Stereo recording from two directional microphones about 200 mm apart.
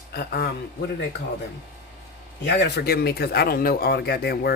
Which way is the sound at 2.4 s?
55° left (ahead or behind).